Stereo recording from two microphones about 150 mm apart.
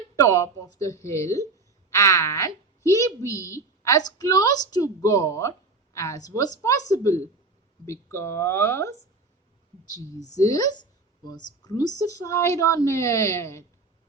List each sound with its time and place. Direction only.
0.2 s a woman's voice: 20° left (ahead or behind)